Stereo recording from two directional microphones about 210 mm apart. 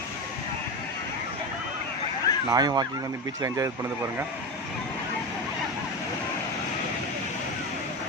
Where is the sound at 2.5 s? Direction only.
20° right (ahead or behind).